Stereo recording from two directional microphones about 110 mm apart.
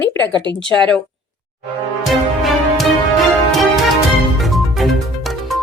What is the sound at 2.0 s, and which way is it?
Music, centre (ahead or behind).